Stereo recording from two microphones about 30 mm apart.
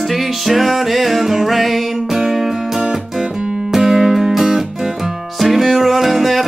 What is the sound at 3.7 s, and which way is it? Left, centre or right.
Music, centre.